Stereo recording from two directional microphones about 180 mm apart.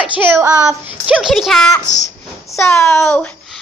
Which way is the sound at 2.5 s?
15° left (ahead or behind).